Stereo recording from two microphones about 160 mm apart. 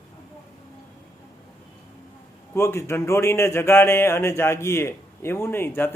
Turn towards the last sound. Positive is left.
turn(degrees=15)  # may be behind; listen again after turning